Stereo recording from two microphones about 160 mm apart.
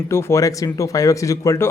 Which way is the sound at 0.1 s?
15° left (ahead or behind).